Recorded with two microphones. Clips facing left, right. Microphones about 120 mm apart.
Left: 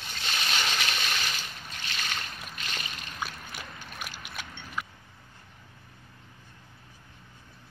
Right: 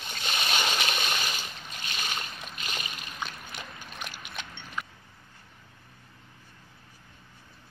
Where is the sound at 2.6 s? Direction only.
15° right (ahead or behind).